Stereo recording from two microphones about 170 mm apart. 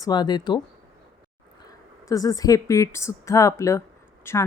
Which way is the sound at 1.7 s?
20° left (ahead or behind).